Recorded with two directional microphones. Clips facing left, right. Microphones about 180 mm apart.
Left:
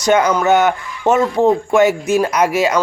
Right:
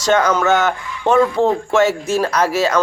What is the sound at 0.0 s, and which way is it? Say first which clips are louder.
A man's voice: left 1 dB; 15° left (ahead or behind).